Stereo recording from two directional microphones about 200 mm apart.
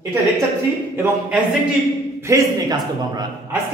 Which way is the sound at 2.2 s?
15° right (ahead or behind).